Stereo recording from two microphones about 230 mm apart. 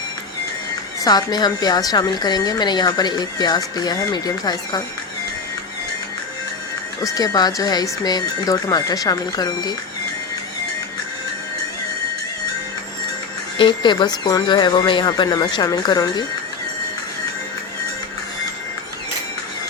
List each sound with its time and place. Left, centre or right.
1.0 s a woman's voice: centre
7.0 s a woman's voice: centre
13.6 s a woman's voice: centre